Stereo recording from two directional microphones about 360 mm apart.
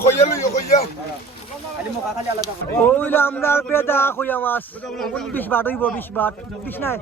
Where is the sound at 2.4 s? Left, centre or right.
Centre.